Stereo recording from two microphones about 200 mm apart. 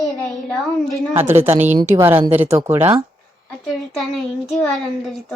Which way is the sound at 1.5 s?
35° right (ahead or behind).